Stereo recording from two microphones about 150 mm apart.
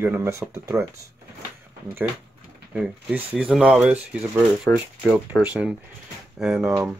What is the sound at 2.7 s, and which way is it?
Speech, 5° right (ahead or behind).